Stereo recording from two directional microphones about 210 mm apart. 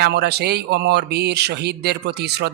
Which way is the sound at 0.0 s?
50° right (ahead or behind).